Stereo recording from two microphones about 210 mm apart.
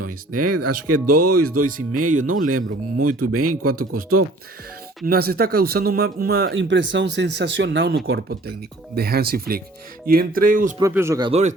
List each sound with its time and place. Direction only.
0.0 s speech: 90° right
2.0 s speech: 40° right (ahead or behind)
2.5 s speech: 90° right
3.0 s speech: 40° right (ahead or behind)
3.3 s speech: 90° right
3.8 s speech: 45° right (ahead or behind)
6.5 s speech: 60° right (ahead or behind); by 10.8 s 40° right (ahead or behind)
10.8 s speech: 15° right (ahead or behind)
11.3 s speech: 30° right (ahead or behind)